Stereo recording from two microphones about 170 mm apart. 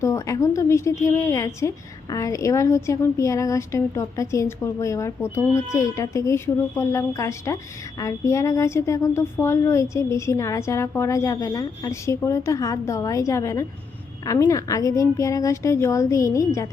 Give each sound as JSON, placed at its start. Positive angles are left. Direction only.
{"t": 0.0, "sound": "a woman's voice", "side_deg": 20}